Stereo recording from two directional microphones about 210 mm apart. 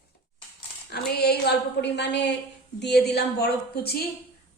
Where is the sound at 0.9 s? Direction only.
50° left (ahead or behind).